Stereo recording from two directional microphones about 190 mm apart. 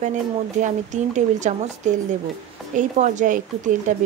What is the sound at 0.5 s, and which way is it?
A woman's voice, 40° right (ahead or behind).